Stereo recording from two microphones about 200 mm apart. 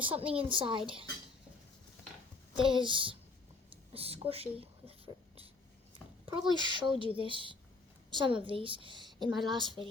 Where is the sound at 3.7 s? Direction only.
30° right (ahead or behind).